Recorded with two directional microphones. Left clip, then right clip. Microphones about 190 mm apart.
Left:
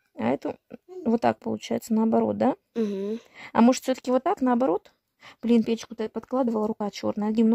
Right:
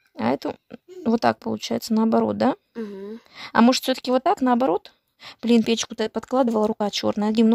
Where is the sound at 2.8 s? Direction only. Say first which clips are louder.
Left 5 dB; 45° left (ahead or behind).